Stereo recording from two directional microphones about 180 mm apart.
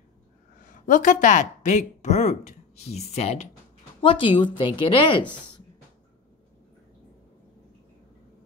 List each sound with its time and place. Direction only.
0.6 s speech: 45° left (ahead or behind); by 5.2 s 30° left (ahead or behind)